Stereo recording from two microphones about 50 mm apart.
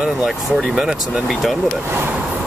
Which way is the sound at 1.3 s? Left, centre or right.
Centre.